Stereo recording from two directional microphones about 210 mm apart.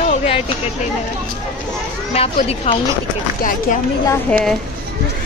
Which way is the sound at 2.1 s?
30° left (ahead or behind).